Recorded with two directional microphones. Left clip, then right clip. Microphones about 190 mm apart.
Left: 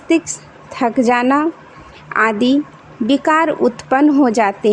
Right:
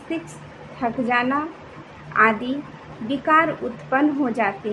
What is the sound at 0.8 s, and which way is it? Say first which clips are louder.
A woman's voice: left 7 dB; 65° left (ahead or behind).